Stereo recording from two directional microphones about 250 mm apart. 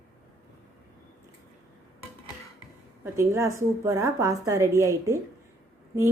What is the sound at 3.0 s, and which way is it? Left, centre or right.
A woman's voice, centre.